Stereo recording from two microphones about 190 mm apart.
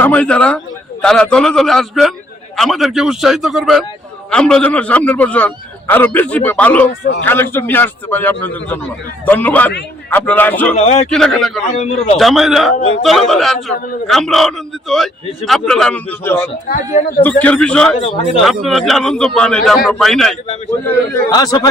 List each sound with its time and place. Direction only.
0.0 s a man's voice: 5° left (ahead or behind)
10.8 s a man's voice: 35° left (ahead or behind)
11.1 s a man's voice: centre (ahead or behind)
11.7 s a man's voice: 35° left (ahead or behind)
12.1 s a man's voice: centre (ahead or behind)
16.6 s speech: 50° left (ahead or behind)
17.4 s a man's voice: 5° left (ahead or behind)
21.2 s a man's voice: 20° left (ahead or behind)